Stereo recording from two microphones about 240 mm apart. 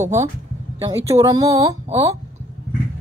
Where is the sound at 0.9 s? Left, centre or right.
Centre.